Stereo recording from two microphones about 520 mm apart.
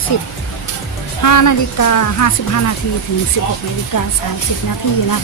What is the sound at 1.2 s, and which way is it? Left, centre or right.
Speech, left.